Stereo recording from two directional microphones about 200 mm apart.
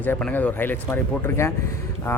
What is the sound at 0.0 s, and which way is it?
Speech, 5° left (ahead or behind).